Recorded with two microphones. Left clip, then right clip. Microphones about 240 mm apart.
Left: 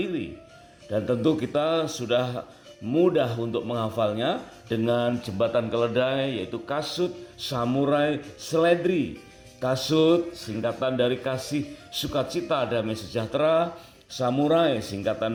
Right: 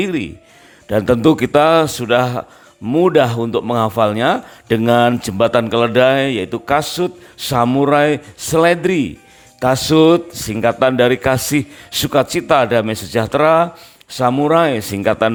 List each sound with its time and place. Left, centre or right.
0.0 s a man's voice: right